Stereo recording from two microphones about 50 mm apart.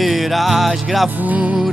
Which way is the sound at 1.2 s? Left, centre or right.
Right.